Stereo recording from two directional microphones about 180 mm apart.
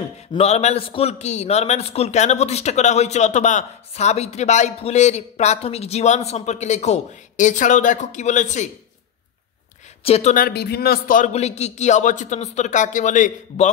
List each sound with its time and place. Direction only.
0.3 s a man's voice: 35° left (ahead or behind)
10.0 s a man's voice: 35° left (ahead or behind)
10.3 s a man's voice: 60° left (ahead or behind)